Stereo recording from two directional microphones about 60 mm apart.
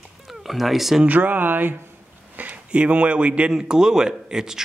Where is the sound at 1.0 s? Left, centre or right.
Right; by 4.6 s centre.